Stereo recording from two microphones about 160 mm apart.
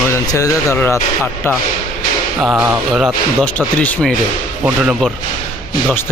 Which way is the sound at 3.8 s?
10° left (ahead or behind).